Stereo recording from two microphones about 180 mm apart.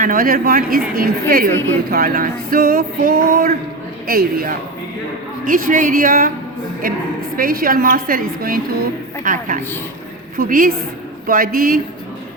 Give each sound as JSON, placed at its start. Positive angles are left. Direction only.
{"t": 0.0, "sound": "a woman's voice", "side_deg": -50}